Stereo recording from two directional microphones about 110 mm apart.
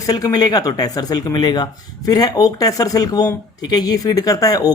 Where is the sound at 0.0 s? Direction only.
30° left (ahead or behind).